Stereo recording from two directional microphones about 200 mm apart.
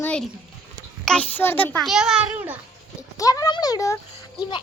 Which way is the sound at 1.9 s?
5° right (ahead or behind).